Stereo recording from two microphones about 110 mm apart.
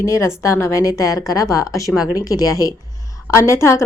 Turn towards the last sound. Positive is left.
turn(degrees=25)  # may be behind; listen again after turning